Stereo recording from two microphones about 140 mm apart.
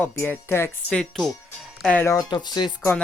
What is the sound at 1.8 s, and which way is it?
Speech, 10° left (ahead or behind).